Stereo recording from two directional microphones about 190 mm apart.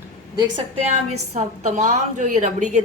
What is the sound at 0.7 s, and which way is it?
A woman's voice, 35° right (ahead or behind).